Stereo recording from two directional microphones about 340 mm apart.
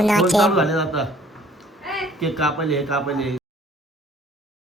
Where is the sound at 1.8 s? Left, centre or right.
Centre.